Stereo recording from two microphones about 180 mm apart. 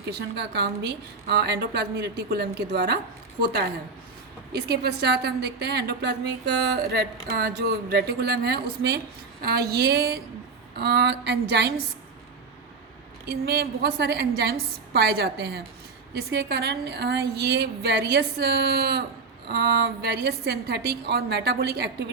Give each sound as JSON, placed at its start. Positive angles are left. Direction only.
{"t": 0.0, "sound": "a woman's voice", "side_deg": -65}
{"t": 4.7, "sound": "a woman's voice", "side_deg": -60}
{"t": 13.2, "sound": "a woman's voice", "side_deg": -65}